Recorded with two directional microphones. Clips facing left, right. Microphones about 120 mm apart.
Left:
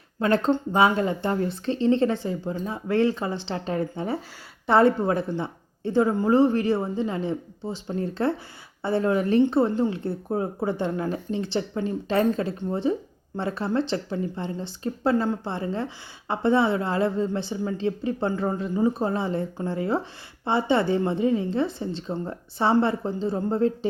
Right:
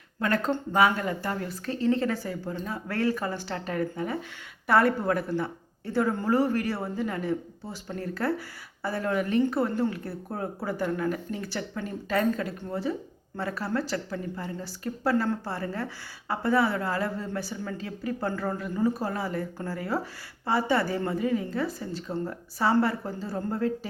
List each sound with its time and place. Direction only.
0.2 s a woman's voice: 25° left (ahead or behind)